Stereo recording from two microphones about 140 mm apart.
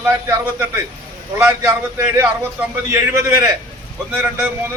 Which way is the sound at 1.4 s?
20° right (ahead or behind).